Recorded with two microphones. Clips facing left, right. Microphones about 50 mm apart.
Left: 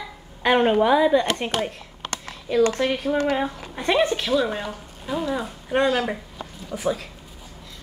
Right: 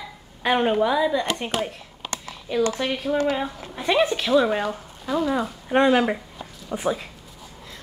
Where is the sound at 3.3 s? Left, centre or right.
Centre.